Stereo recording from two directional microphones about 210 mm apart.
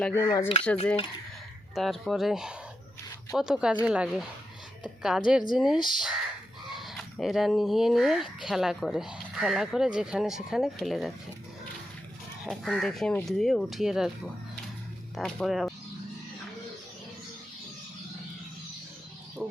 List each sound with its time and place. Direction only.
0.0 s speech: 15° left (ahead or behind)
1.7 s speech: centre (ahead or behind)
12.5 s speech: centre (ahead or behind)
15.1 s speech: centre (ahead or behind)
19.4 s speech: 10° right (ahead or behind)